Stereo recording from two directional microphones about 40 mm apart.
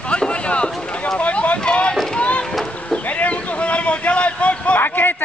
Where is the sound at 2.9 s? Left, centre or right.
Left.